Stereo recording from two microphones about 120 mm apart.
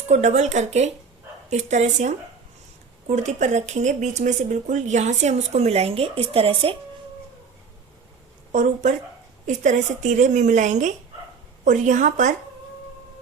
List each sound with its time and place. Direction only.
0.1 s speech: 75° right (ahead or behind); by 6.7 s 50° right (ahead or behind)
8.5 s a woman's voice: 85° right